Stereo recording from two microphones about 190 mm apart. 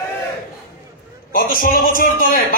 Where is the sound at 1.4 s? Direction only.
50° left (ahead or behind).